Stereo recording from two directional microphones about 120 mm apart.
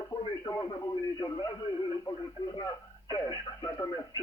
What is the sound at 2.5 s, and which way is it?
Speech, 40° left (ahead or behind).